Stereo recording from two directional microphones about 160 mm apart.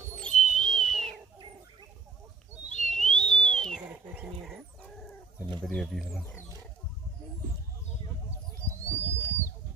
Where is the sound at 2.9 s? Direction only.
5° left (ahead or behind).